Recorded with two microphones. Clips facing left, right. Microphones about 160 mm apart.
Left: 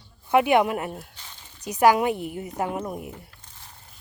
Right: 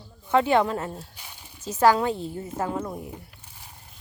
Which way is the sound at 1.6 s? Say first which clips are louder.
Left 1 dB; 15° left (ahead or behind).